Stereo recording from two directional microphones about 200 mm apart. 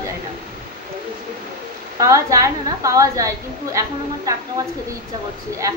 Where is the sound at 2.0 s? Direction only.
15° right (ahead or behind).